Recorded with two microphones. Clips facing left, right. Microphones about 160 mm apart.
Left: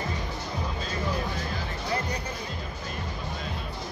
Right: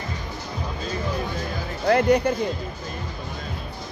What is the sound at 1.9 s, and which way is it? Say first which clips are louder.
Speech: right 15 dB; 70° right (ahead or behind).